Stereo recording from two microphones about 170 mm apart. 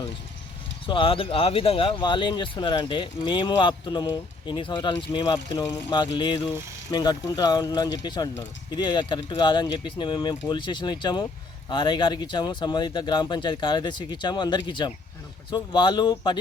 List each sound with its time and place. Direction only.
0.9 s speech: 30° left (ahead or behind)